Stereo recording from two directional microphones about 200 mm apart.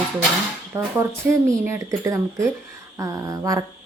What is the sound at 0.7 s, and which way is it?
A woman's voice, 10° right (ahead or behind).